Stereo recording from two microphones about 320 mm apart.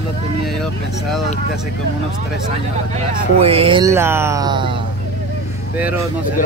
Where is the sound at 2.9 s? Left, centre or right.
Centre.